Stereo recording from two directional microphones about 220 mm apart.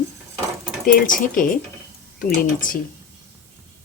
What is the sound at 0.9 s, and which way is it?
Speech, 40° left (ahead or behind).